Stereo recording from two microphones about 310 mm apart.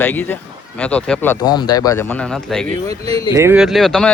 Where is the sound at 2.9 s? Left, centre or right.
Centre.